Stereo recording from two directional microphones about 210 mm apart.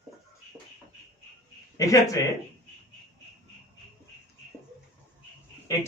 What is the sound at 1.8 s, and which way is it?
Speech, 15° left (ahead or behind).